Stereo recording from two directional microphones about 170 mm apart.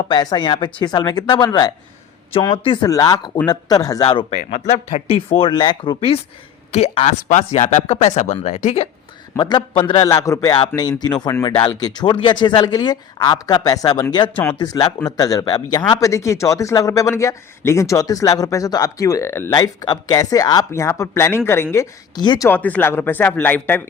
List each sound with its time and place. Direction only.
0.1 s speech: 25° left (ahead or behind)
4.6 s speech: 40° left (ahead or behind)
9.3 s speech: 25° left (ahead or behind)
22.4 s speech: 10° left (ahead or behind)